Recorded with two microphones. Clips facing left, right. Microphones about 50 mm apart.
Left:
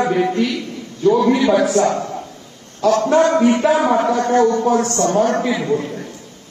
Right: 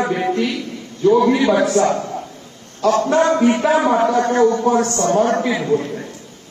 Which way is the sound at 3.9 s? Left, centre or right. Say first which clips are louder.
Even; centre.